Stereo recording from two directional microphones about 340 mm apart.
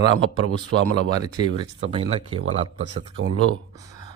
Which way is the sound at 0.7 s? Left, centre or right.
Right.